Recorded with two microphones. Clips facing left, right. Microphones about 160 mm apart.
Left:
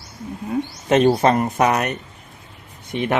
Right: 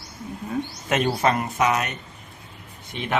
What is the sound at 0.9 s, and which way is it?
Speech, 35° left (ahead or behind).